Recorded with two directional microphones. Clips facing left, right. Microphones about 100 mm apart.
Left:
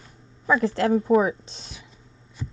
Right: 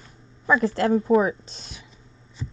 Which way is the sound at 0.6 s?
10° right (ahead or behind).